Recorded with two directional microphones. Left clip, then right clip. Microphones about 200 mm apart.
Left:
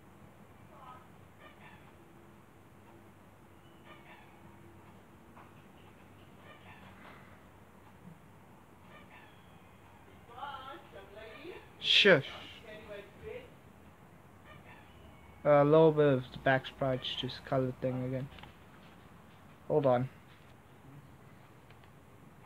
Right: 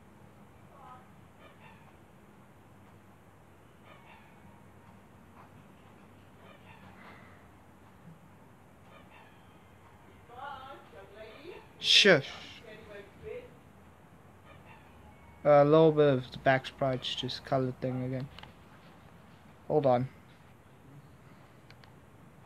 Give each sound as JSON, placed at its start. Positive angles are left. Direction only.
{"t": 11.8, "sound": "a sound", "side_deg": -20}
{"t": 15.4, "sound": "speech", "side_deg": -25}
{"t": 19.7, "sound": "speech", "side_deg": -20}